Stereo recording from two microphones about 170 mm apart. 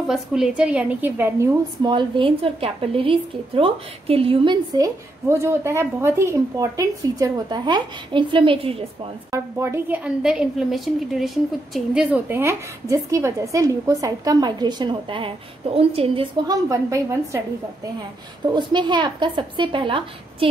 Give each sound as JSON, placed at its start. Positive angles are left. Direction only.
{"t": 0.1, "sound": "a woman's voice", "side_deg": -5}
{"t": 1.8, "sound": "a woman's voice", "side_deg": -25}
{"t": 4.7, "sound": "a woman's voice", "side_deg": -20}
{"t": 9.3, "sound": "a woman's voice", "side_deg": -15}
{"t": 18.5, "sound": "a woman's voice", "side_deg": -25}